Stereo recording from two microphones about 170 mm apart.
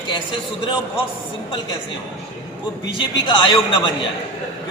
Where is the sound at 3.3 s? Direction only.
25° left (ahead or behind).